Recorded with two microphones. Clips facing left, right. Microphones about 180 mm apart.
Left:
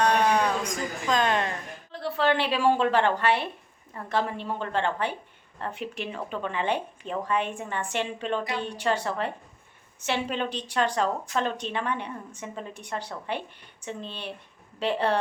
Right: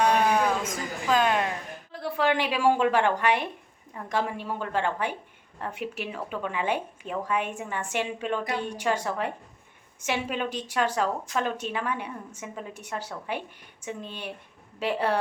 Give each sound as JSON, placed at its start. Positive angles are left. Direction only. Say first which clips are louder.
{"t": 0.0, "sound": "music", "louder": "even", "side_deg": -5}
{"t": 3.9, "sound": "a woman's voice", "louder": "left 1 dB", "side_deg": -10}